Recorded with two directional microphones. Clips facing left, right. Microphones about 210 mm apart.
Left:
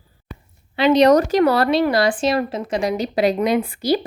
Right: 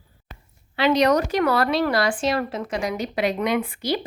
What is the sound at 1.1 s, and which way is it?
Speech, 40° left (ahead or behind).